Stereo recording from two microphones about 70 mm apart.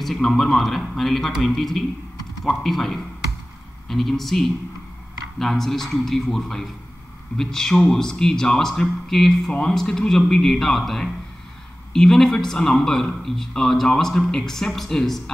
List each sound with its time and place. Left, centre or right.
0.0 s a man's voice: centre
9.5 s a man's voice: centre